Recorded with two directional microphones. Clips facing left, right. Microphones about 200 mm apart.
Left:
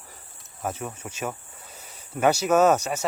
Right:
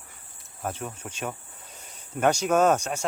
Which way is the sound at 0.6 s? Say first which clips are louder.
Left 2 dB; 5° left (ahead or behind).